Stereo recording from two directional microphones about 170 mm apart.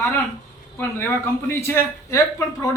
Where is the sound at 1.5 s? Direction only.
15° left (ahead or behind).